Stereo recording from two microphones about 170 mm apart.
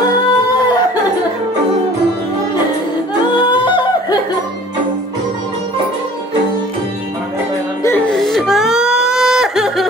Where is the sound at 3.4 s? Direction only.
25° left (ahead or behind).